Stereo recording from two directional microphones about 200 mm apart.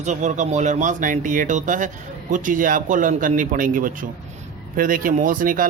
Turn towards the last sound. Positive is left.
turn(degrees=-45)  # may be behind; listen again after turning